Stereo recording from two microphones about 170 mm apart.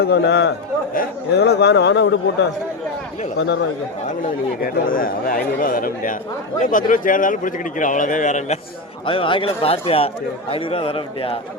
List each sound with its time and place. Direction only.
0.0 s a man's voice: 75° left (ahead or behind)
3.3 s a man's voice: 80° left
4.6 s a man's voice: 55° left (ahead or behind)
9.0 s a man's voice: 30° left (ahead or behind)